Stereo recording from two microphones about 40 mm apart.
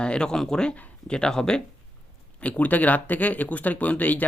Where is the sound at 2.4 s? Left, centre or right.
Left.